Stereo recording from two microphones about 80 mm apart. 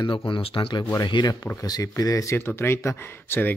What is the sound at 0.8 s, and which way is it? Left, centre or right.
Speech, left.